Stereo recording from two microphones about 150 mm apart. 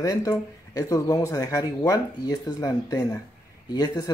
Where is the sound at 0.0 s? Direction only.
25° left (ahead or behind).